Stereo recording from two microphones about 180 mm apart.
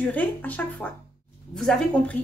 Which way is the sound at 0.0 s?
10° left (ahead or behind).